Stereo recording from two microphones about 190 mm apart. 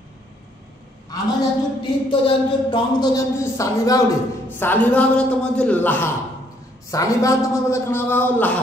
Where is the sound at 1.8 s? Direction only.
25° left (ahead or behind); by 8.5 s 10° left (ahead or behind).